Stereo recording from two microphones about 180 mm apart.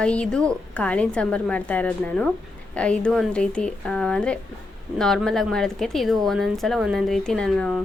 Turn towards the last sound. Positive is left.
turn(degrees=0)  # may be behind; listen again after turning